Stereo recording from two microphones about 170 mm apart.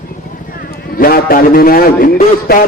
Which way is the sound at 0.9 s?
60° left (ahead or behind).